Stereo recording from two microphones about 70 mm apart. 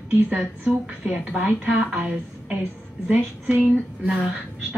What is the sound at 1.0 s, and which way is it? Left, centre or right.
Speech, centre.